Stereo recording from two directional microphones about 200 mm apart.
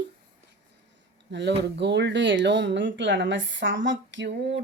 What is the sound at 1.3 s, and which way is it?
Speech, 60° right (ahead or behind).